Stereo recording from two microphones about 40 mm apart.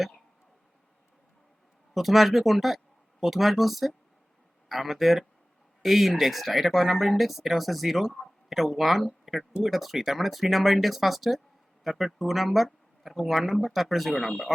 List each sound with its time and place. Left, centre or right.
1.9 s speech: centre